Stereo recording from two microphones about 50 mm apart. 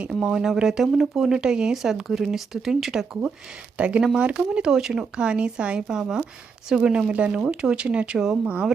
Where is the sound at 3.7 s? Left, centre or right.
Right.